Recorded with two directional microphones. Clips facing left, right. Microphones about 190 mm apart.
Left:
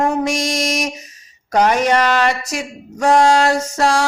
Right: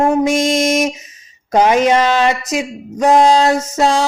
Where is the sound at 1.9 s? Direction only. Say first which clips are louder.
Right 3 dB; 20° right (ahead or behind).